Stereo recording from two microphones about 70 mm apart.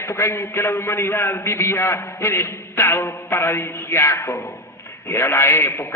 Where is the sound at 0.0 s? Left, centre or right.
Left.